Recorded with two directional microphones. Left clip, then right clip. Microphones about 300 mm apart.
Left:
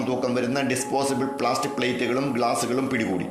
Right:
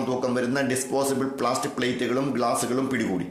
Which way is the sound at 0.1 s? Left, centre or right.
Centre.